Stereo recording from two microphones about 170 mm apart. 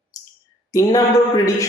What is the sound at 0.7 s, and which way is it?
Speech, 20° left (ahead or behind).